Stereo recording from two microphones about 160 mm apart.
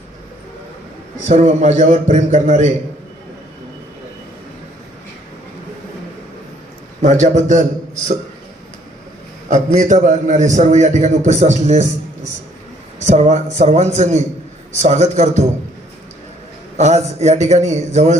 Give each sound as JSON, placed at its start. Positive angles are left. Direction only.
{"t": 1.3, "sound": "a man's voice", "side_deg": -45}
{"t": 7.0, "sound": "a man's voice", "side_deg": -50}
{"t": 9.7, "sound": "a man's voice", "side_deg": -50}
{"t": 13.1, "sound": "a man's voice", "side_deg": -45}
{"t": 16.7, "sound": "a man's voice", "side_deg": -45}